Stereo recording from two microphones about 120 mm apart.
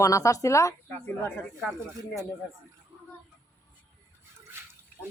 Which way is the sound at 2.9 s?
30° right (ahead or behind).